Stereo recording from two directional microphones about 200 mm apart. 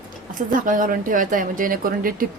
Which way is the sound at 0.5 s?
40° right (ahead or behind).